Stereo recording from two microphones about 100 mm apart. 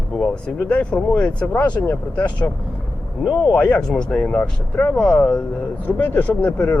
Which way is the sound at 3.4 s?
15° left (ahead or behind).